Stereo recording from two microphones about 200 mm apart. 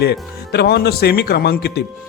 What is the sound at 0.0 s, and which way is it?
A man's voice, 55° left (ahead or behind).